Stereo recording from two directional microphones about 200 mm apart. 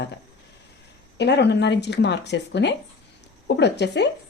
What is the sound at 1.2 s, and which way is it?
A woman's voice, 60° left (ahead or behind).